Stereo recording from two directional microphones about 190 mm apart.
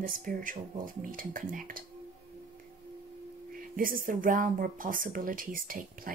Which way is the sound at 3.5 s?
50° right (ahead or behind).